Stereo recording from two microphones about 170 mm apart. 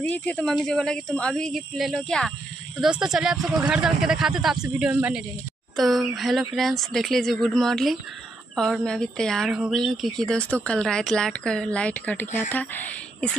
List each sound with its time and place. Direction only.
0.0 s a woman's voice: 10° left (ahead or behind)